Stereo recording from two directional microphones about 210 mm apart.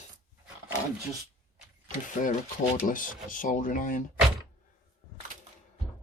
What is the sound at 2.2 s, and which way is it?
Speech, 35° left (ahead or behind).